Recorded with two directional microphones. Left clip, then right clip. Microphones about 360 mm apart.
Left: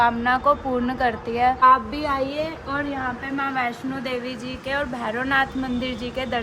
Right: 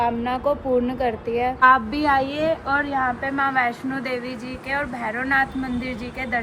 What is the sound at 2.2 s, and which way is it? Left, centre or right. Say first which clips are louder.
Speech: right 4 dB; centre.